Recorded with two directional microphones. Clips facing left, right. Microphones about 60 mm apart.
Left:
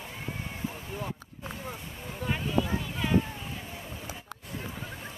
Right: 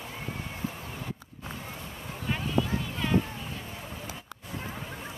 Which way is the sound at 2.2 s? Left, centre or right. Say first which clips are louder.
Even; centre.